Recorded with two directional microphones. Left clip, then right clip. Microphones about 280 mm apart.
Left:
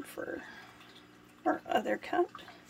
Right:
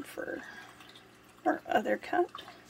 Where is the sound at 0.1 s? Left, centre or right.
Centre.